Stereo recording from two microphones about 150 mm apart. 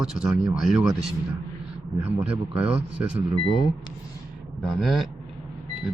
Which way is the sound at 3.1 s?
35° right (ahead or behind).